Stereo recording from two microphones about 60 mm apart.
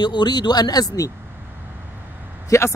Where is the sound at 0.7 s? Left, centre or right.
Left.